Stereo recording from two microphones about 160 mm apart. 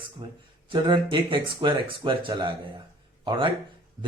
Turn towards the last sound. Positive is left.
turn(degrees=-30)  # may be behind; listen again after turning